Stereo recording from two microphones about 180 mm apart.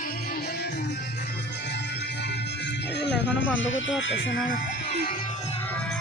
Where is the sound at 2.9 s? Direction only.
70° left (ahead or behind); by 4.2 s 90° left.